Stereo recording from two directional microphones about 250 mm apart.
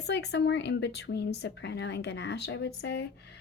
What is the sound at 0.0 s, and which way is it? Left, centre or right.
Speech, left.